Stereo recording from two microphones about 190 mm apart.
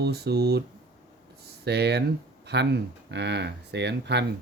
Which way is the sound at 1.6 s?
60° right (ahead or behind).